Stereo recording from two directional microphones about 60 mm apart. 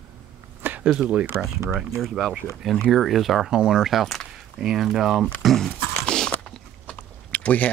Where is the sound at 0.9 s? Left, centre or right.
Centre.